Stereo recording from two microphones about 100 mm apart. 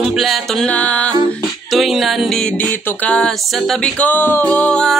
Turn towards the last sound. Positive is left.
turn(degrees=10)  # may be behind; listen again after turning